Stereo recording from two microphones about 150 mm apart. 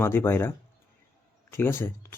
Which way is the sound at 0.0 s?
15° left (ahead or behind).